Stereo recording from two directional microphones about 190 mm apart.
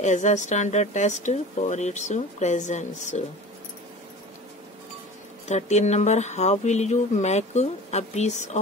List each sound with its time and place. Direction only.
0.0 s speech: 40° left (ahead or behind)
5.5 s speech: 35° left (ahead or behind)